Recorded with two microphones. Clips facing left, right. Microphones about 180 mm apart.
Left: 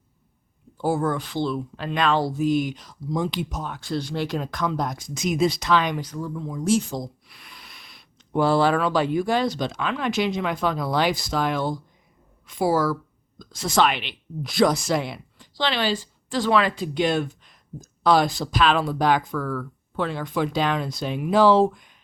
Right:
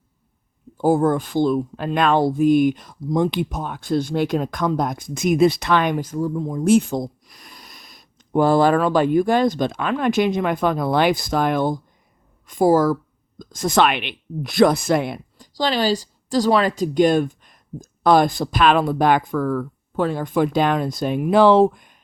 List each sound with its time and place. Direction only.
0.8 s speech: 45° right (ahead or behind)
7.3 s speech: 40° right (ahead or behind)